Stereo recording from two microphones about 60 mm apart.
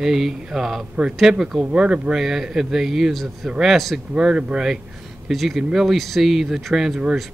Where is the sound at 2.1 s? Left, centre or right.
Centre.